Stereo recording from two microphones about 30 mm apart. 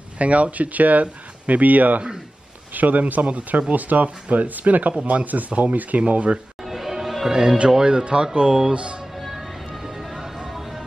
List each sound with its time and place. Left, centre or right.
0.2 s speech: right
6.6 s music: centre
7.8 s speech: right
8.7 s speech: right
9.3 s music: centre